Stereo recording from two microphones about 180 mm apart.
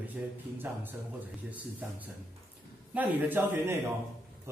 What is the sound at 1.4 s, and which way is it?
Speech, 10° right (ahead or behind).